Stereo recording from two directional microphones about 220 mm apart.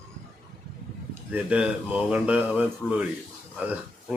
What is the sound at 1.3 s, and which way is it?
Speech, 5° right (ahead or behind).